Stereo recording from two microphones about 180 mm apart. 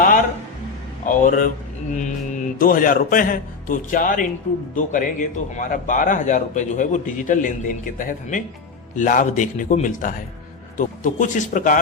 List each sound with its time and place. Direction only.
1.0 s speech: 45° left (ahead or behind)